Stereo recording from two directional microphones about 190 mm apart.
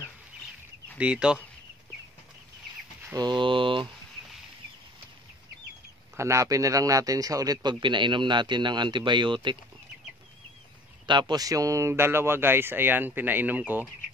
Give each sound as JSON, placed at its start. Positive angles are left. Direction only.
{"t": 0.9, "sound": "speech", "side_deg": -5}
{"t": 3.2, "sound": "speech", "side_deg": -25}
{"t": 6.1, "sound": "speech", "side_deg": -15}
{"t": 11.1, "sound": "speech", "side_deg": -25}